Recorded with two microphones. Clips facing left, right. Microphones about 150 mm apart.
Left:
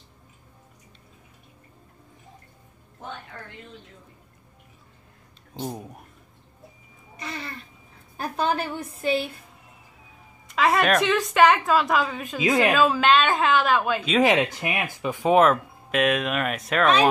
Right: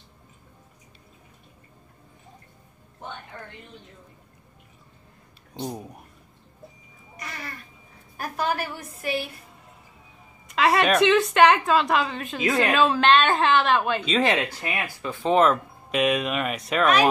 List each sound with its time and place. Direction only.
5.5 s a woman's voice: 5° left (ahead or behind)
7.2 s a sound: 30° left (ahead or behind)
8.2 s a woman's voice: 25° left (ahead or behind)
10.5 s a woman's voice: centre (ahead or behind)
12.4 s a woman's voice: 20° left (ahead or behind)
12.7 s a woman's voice: 5° left (ahead or behind)
14.2 s speech: 20° left (ahead or behind); by 16.8 s centre (ahead or behind)
16.8 s a woman's voice: 25° left (ahead or behind)